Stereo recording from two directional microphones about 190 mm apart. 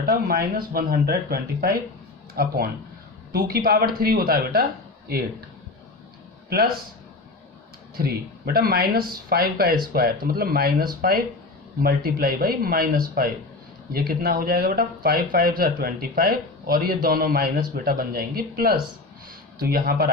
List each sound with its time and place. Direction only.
0.0 s speech: 50° right (ahead or behind)
7.9 s speech: 50° right (ahead or behind)